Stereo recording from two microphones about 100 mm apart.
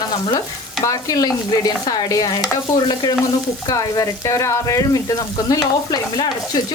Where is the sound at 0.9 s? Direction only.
35° left (ahead or behind).